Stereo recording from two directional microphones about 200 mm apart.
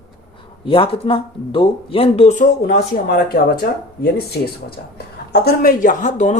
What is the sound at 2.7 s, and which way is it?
Speech, 50° left (ahead or behind).